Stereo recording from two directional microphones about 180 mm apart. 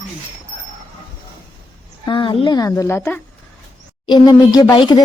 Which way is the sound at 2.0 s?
25° left (ahead or behind).